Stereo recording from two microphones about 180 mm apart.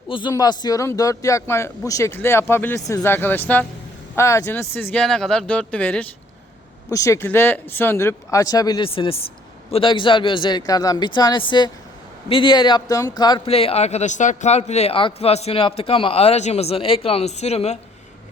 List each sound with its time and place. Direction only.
0.1 s speech: 25° left (ahead or behind); by 6.1 s 5° left (ahead or behind)
6.9 s speech: 15° left (ahead or behind); by 17.7 s 35° left (ahead or behind)